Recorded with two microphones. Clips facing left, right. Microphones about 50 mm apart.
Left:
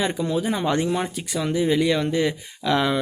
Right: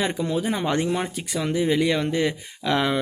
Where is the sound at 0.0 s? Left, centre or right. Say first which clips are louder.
Left 1 dB; right.